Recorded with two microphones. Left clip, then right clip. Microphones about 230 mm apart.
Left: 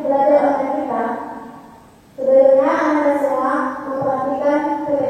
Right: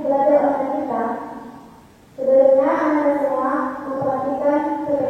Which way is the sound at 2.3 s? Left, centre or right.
Centre.